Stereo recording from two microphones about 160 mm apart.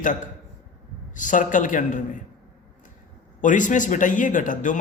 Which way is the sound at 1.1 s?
55° left (ahead or behind).